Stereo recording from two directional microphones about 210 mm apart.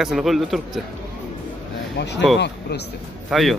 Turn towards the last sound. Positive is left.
turn(degrees=0)  # may be behind; listen again after turning